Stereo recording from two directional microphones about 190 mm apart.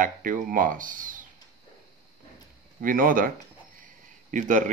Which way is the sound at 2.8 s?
45° right (ahead or behind).